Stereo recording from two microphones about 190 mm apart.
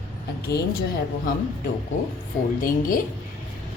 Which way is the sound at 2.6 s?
45° left (ahead or behind).